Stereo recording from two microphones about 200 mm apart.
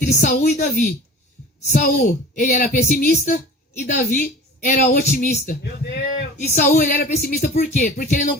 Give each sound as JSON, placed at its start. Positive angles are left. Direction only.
{"t": 0.0, "sound": "a woman's voice", "side_deg": 40}